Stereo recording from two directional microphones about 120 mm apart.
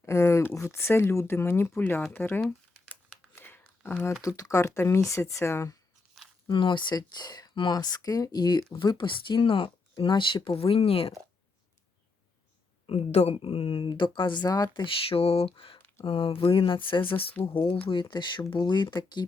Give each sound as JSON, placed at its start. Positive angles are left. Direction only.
{"t": 0.0, "sound": "speech", "side_deg": 25}
{"t": 2.4, "sound": "crumpling", "side_deg": 10}
{"t": 3.3, "sound": "a sound", "side_deg": 15}
{"t": 4.2, "sound": "speech", "side_deg": 30}
{"t": 6.2, "sound": "a sound", "side_deg": 0}
{"t": 6.5, "sound": "speech", "side_deg": 45}
{"t": 12.9, "sound": "speech", "side_deg": 60}